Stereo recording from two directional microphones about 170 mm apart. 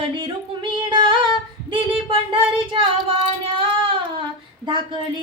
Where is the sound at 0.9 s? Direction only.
30° right (ahead or behind).